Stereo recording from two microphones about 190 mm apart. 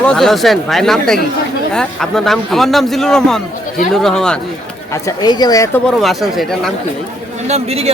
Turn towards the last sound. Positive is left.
turn(degrees=-35)  # may be behind; listen again after turning